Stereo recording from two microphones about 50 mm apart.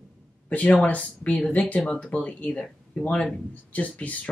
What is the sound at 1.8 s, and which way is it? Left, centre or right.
Speech, centre.